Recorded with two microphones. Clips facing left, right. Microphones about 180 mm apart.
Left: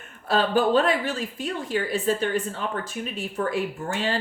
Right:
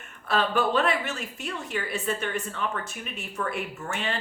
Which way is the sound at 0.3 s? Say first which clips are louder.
Left 4 dB; 30° left (ahead or behind).